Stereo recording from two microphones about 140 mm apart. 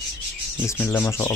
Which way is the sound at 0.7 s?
15° left (ahead or behind).